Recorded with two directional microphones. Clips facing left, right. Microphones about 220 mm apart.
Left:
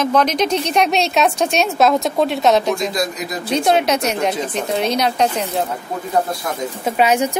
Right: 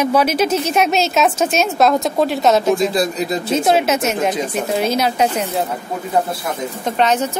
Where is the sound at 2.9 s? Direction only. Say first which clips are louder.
Right 4 dB; 30° right (ahead or behind).